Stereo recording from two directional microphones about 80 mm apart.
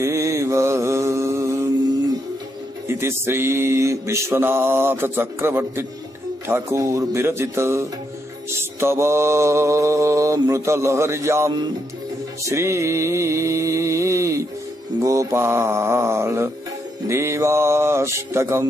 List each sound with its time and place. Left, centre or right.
0.0 s mantra: right
2.9 s mantra: right
12.4 s a sound: right
15.0 s mantra: right